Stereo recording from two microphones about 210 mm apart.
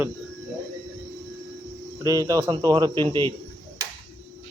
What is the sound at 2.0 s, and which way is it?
Speech, 15° right (ahead or behind).